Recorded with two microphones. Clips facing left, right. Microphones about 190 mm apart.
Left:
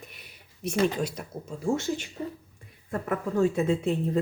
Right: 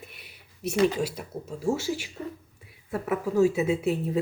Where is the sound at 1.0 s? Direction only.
5° right (ahead or behind).